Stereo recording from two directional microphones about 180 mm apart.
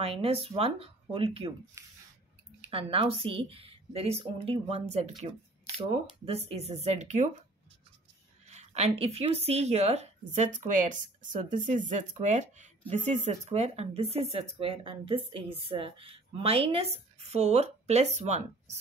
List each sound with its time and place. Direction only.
0.0 s speech: 30° right (ahead or behind)
1.8 s speech: 15° right (ahead or behind)
2.6 s speech: 30° right (ahead or behind)
8.5 s speech: 40° right (ahead or behind)